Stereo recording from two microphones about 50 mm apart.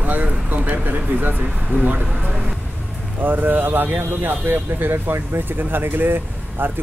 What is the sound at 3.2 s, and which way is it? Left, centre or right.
Speech, right.